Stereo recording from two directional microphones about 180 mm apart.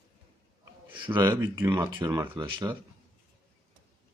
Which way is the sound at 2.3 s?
25° right (ahead or behind).